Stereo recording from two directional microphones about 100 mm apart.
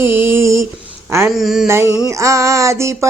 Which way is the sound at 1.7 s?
25° right (ahead or behind).